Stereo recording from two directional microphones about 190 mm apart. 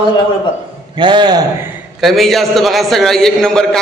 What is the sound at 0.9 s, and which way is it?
Speech, 25° right (ahead or behind).